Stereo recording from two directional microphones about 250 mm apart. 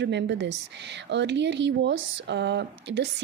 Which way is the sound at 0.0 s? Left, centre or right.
Right.